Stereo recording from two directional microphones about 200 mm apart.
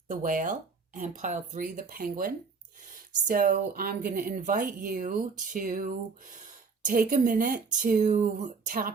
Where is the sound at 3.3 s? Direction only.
45° right (ahead or behind).